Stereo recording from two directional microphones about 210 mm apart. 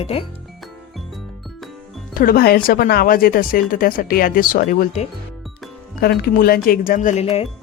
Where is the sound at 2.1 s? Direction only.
45° left (ahead or behind).